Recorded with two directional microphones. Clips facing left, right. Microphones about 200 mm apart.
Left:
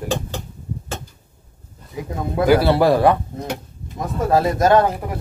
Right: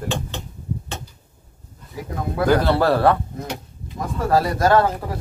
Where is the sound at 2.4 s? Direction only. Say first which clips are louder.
Left 3 dB; 10° left (ahead or behind).